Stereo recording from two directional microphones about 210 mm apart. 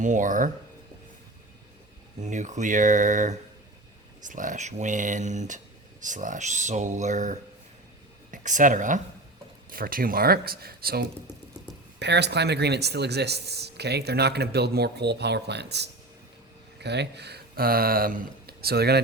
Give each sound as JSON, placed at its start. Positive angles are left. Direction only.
{"t": 0.0, "sound": "speech", "side_deg": -40}
{"t": 2.2, "sound": "speech", "side_deg": -35}